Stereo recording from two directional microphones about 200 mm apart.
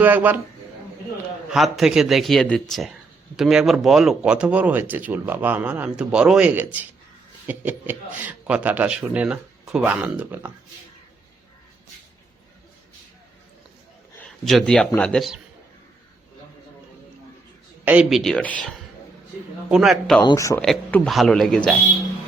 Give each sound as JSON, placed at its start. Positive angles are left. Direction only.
{"t": 0.0, "sound": "speech", "side_deg": -10}
{"t": 1.5, "sound": "a man's voice", "side_deg": 0}
{"t": 14.2, "sound": "speech", "side_deg": 0}
{"t": 17.8, "sound": "a man's voice", "side_deg": -5}
{"t": 19.6, "sound": "a man's voice", "side_deg": -5}
{"t": 20.2, "sound": "speech", "side_deg": 15}
{"t": 20.6, "sound": "a man's voice", "side_deg": 5}